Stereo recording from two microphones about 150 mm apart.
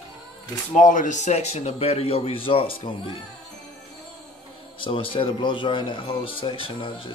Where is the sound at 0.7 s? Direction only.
55° left (ahead or behind); by 3.1 s 35° left (ahead or behind).